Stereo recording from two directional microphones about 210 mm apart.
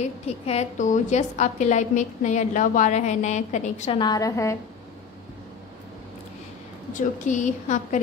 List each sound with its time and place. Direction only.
0.5 s a woman's voice: 35° left (ahead or behind)
4.0 s a woman's voice: 15° left (ahead or behind)
6.9 s a woman's voice: 35° left (ahead or behind)